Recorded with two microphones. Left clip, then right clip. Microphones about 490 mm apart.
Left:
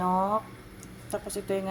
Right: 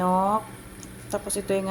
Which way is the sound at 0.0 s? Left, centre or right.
Left.